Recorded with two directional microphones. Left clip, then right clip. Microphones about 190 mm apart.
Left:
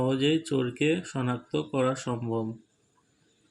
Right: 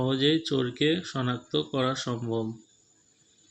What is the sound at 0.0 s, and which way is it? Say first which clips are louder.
Speech: right 1 dB; 5° left (ahead or behind).